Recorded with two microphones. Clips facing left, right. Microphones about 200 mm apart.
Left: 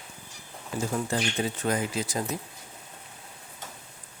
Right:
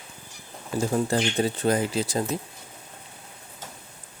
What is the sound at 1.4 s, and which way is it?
Speech, 35° right (ahead or behind).